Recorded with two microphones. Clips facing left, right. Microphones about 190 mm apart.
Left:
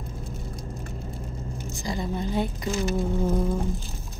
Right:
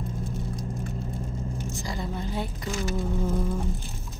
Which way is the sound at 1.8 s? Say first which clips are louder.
Left 7 dB; 20° left (ahead or behind).